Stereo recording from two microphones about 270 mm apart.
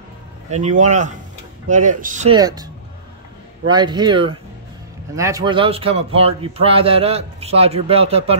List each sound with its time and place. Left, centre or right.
0.5 s a man's voice: right
2.3 s a man's voice: centre